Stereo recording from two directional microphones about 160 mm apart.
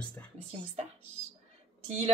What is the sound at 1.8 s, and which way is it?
Speech, 45° right (ahead or behind).